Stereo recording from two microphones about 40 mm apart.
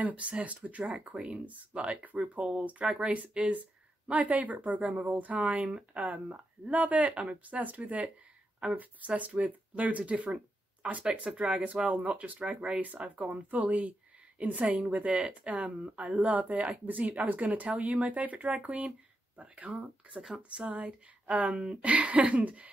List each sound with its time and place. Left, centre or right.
0.0 s speech: right
4.1 s speech: right
10.8 s speech: right
11.1 s speech: right
12.8 s speech: right
20.2 s speech: right
20.7 s speech: right